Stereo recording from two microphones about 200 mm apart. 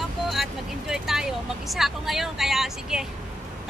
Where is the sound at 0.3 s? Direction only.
Centre (ahead or behind).